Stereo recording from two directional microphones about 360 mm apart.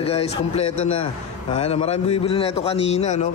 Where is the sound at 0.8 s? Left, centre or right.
Left.